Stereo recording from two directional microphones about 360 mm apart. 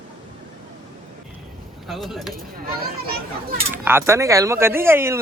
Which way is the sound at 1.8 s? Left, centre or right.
Centre.